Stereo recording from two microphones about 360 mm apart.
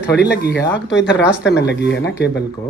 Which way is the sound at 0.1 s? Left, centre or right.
Left.